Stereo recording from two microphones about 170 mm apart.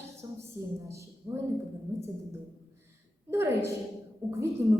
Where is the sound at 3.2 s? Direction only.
15° right (ahead or behind).